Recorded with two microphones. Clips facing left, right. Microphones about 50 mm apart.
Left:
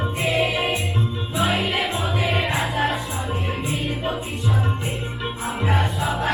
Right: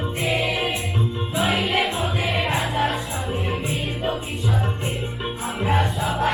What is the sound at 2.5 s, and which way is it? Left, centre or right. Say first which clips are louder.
Music: even; centre.